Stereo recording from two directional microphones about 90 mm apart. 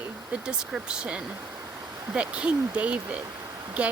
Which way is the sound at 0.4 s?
10° right (ahead or behind).